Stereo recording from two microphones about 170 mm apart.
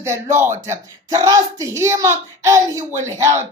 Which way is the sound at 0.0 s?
15° right (ahead or behind).